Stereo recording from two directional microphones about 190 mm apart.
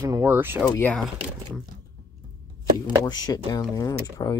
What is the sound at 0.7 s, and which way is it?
Speech, 10° left (ahead or behind).